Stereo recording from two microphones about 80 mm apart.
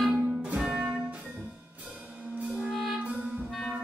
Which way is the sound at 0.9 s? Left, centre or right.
Centre.